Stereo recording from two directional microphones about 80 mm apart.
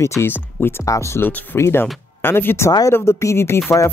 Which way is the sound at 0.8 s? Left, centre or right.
Left.